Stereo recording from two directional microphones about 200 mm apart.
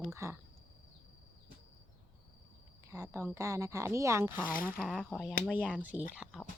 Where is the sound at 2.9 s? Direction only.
15° right (ahead or behind).